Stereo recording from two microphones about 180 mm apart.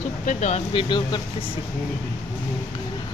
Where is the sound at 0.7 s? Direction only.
25° left (ahead or behind).